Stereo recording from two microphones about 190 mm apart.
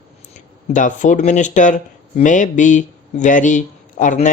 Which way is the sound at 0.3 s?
40° left (ahead or behind).